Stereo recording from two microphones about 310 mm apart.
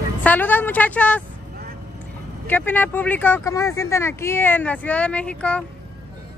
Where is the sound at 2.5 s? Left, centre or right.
Centre.